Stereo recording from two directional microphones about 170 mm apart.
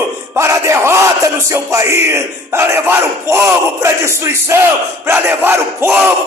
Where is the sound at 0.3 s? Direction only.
15° right (ahead or behind).